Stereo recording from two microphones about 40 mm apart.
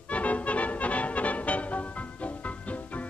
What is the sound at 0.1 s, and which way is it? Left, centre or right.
Music, left.